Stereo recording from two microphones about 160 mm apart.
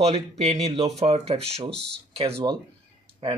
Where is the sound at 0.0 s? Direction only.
40° right (ahead or behind).